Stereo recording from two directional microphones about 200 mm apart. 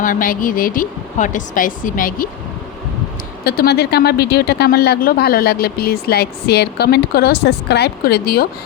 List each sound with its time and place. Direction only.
0.0 s speech: 45° left (ahead or behind)
3.4 s speech: 50° left (ahead or behind)